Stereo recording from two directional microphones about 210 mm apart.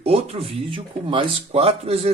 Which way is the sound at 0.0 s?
25° right (ahead or behind).